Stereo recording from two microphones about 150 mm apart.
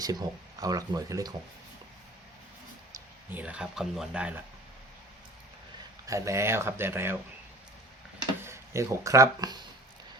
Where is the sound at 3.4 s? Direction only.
5° right (ahead or behind).